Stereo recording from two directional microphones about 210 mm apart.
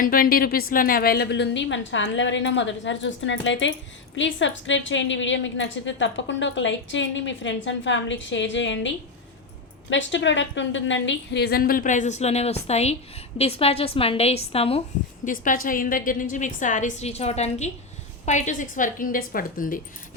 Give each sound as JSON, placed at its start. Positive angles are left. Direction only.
{"t": 0.0, "sound": "a woman's voice", "side_deg": 45}
{"t": 9.9, "sound": "a woman's voice", "side_deg": 60}
{"t": 15.2, "sound": "a woman's voice", "side_deg": 40}